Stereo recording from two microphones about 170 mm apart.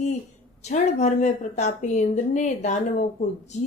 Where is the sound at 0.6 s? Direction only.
45° left (ahead or behind).